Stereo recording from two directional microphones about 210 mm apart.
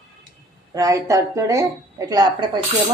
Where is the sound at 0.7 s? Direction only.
15° right (ahead or behind).